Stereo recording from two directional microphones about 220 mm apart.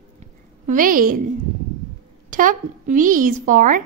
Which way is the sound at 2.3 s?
35° right (ahead or behind).